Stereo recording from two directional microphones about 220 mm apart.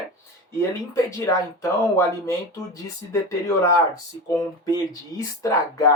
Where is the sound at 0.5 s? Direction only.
15° left (ahead or behind).